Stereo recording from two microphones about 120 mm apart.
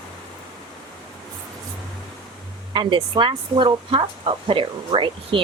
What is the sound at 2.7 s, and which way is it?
Speech, 45° right (ahead or behind).